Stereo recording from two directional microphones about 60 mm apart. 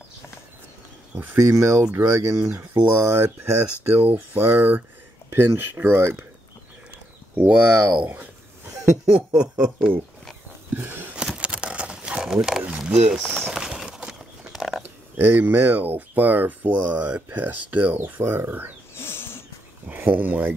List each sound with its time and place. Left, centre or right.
1.1 s speech: right
1.4 s speech: right
7.3 s speech: right
9.3 s speech: centre
10.7 s a sound: right
11.1 s crumpling: centre
12.8 s speech: centre
13.5 s horse: centre
14.8 s speech: right
18.9 s a sound: left
19.9 s speech: right